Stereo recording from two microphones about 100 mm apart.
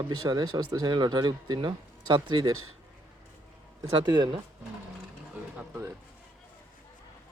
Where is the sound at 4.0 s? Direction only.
45° right (ahead or behind).